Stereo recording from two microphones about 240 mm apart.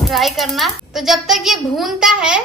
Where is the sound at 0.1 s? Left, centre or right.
Centre.